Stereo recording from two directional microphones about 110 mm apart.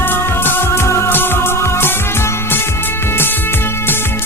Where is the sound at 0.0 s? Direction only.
20° left (ahead or behind).